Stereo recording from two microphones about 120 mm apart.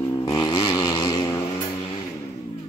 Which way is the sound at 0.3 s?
30° left (ahead or behind).